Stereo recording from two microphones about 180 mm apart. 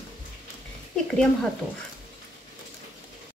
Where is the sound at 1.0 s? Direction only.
5° left (ahead or behind).